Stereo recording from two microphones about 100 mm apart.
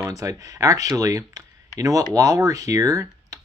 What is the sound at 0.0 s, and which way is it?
Speech, 35° right (ahead or behind).